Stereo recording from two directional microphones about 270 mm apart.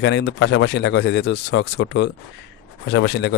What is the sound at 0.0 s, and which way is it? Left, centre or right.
Speech, left.